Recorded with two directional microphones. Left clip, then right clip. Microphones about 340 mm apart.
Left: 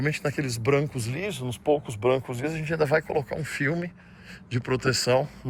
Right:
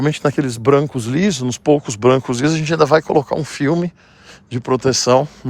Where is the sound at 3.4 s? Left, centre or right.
Centre.